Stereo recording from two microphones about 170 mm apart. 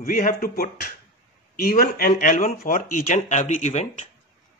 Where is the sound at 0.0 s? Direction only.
55° left (ahead or behind).